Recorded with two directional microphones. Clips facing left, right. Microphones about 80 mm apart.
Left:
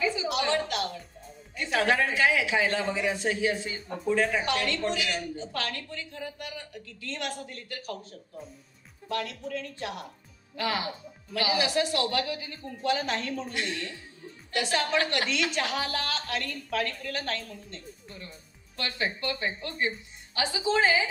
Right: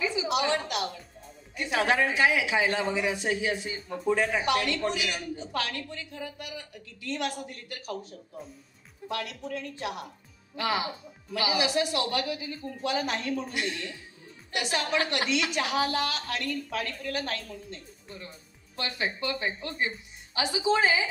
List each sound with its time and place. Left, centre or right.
0.0 s a sound: centre
1.6 s speech: right
9.2 s speech: centre
18.8 s speech: right